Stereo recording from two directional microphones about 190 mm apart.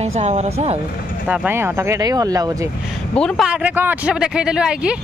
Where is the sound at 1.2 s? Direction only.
5° right (ahead or behind).